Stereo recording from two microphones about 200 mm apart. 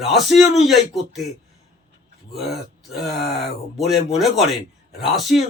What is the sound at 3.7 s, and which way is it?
Speech, centre (ahead or behind).